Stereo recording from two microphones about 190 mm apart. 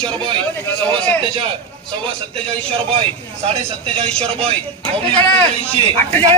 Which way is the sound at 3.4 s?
30° right (ahead or behind).